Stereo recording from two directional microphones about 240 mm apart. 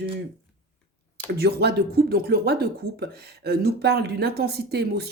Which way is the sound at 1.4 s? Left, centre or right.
Right.